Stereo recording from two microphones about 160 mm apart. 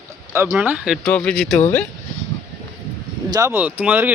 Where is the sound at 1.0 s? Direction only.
5° left (ahead or behind).